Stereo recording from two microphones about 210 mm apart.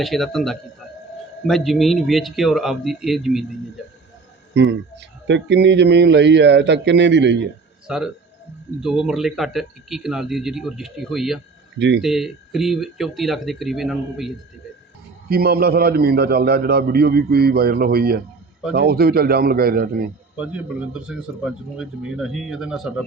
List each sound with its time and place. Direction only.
0.0 s speech: centre (ahead or behind)
4.5 s speech: 55° right (ahead or behind)
7.9 s speech: 5° right (ahead or behind)
11.8 s speech: 55° right (ahead or behind)
12.0 s speech: centre (ahead or behind)
15.3 s a man's voice: 45° right (ahead or behind)
20.3 s speech: 5° right (ahead or behind)